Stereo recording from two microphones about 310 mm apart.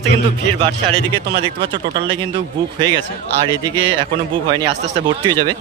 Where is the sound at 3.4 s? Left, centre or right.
Centre.